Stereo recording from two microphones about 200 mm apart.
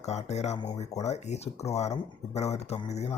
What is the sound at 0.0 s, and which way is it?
Speech, 35° left (ahead or behind).